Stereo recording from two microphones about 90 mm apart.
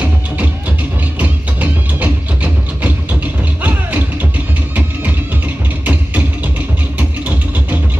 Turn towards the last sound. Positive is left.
turn(degrees=-20)  # may be behind; listen again after turning